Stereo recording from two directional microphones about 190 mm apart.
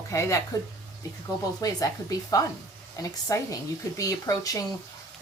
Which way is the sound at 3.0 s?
15° left (ahead or behind).